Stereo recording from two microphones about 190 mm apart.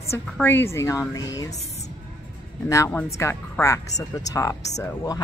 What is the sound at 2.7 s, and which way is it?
A woman's voice, 15° left (ahead or behind).